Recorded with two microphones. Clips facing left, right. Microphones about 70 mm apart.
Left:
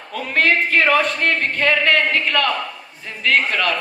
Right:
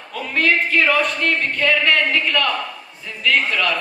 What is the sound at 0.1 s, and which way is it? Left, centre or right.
Speech, left.